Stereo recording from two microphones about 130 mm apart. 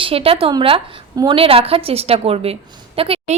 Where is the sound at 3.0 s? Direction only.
45° right (ahead or behind).